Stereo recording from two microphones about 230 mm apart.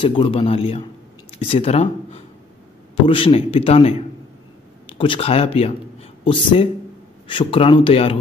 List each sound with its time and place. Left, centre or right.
0.0 s speech: left